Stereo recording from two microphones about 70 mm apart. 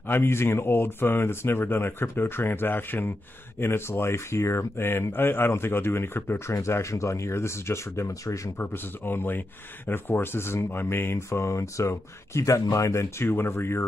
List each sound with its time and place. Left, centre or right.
0.1 s speech: left
6.5 s speech: left
8.5 s speech: left
13.3 s speech: left